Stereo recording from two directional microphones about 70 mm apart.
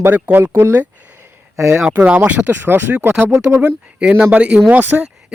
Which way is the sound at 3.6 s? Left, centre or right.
Centre.